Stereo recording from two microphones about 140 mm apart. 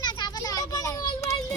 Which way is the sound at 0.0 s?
30° left (ahead or behind).